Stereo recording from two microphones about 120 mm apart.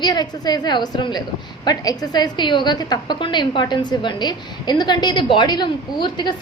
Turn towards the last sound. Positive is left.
turn(degrees=40)  # may be behind; listen again after turning